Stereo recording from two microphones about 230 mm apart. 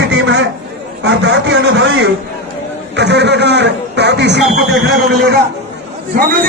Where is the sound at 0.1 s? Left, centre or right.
Right.